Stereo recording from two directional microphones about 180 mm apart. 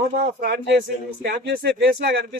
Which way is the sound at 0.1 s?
55° right (ahead or behind).